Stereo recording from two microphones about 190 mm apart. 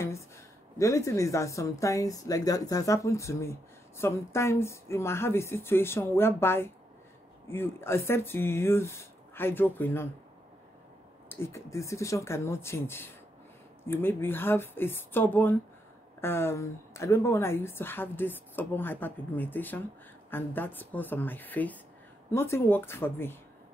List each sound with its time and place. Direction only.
0.7 s a woman's voice: 15° left (ahead or behind)
11.2 s a woman's voice: 15° left (ahead or behind)